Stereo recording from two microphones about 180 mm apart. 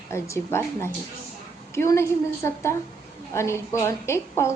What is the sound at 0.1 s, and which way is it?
A woman's voice, 15° left (ahead or behind).